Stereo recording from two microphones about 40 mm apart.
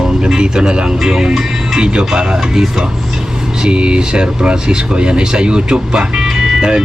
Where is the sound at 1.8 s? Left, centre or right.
Right.